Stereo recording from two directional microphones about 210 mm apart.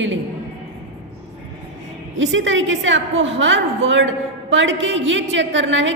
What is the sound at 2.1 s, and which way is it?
A woman's voice, 65° right (ahead or behind).